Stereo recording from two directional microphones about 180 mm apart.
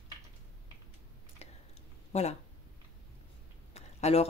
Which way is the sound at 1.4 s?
35° left (ahead or behind).